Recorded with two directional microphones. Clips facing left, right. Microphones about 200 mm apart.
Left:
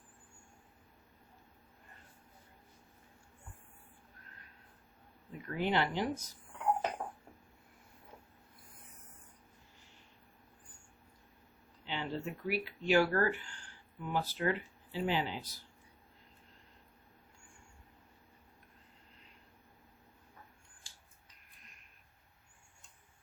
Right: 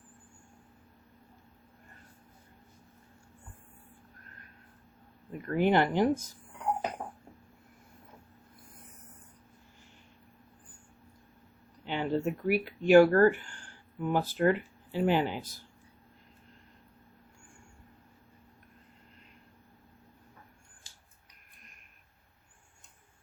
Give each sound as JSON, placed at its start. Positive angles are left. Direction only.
{"t": 5.3, "sound": "speech", "side_deg": -55}
{"t": 11.9, "sound": "speech", "side_deg": -50}